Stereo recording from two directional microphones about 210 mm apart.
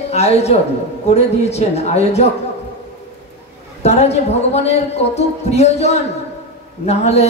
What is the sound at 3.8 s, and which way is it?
Speech, 30° left (ahead or behind).